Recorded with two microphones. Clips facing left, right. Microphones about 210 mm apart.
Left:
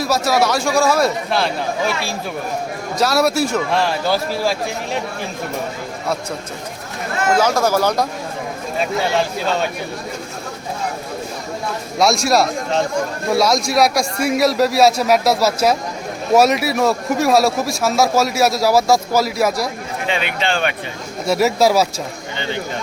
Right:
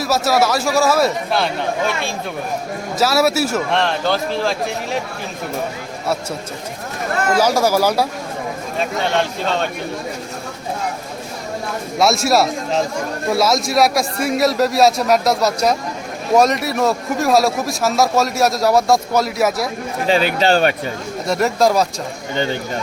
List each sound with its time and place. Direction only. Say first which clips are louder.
0.0 s a man's voice: even; centre (ahead or behind)
3.0 s a man's voice: even; 5° right (ahead or behind)
7.3 s speech: right 1 dB; 10° right (ahead or behind)
8.8 s a man's voice: left 1 dB; 5° left (ahead or behind)
11.9 s a man's voice: even; centre (ahead or behind)
20.1 s a man's voice: right 6 dB; 40° right (ahead or behind)
21.2 s a man's voice: left 1 dB; 5° left (ahead or behind)